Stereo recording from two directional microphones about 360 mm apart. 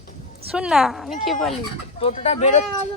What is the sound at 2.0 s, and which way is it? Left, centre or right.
Speech, centre.